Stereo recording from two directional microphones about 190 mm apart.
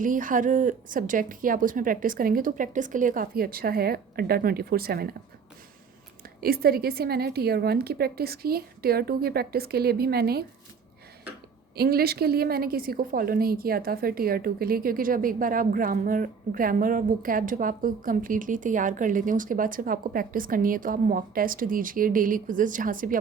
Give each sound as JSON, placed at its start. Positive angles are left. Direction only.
{"t": 0.0, "sound": "a woman's voice", "side_deg": -45}
{"t": 6.4, "sound": "a woman's voice", "side_deg": -55}
{"t": 11.8, "sound": "a woman's voice", "side_deg": -55}